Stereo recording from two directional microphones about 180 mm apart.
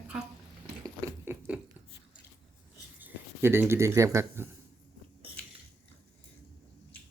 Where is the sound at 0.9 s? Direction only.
15° right (ahead or behind).